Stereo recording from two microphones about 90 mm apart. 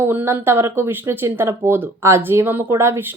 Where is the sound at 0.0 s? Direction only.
25° right (ahead or behind).